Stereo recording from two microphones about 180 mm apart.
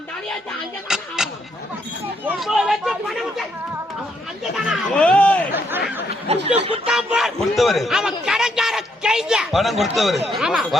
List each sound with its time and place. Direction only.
0.9 s speech: 5° right (ahead or behind)
4.6 s speech: centre (ahead or behind)
6.3 s speech: 35° right (ahead or behind)
6.8 s speech: 5° right (ahead or behind)